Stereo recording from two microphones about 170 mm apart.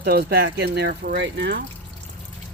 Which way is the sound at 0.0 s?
70° right (ahead or behind).